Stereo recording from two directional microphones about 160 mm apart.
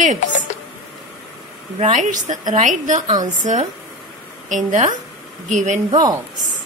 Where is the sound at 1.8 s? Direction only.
50° right (ahead or behind).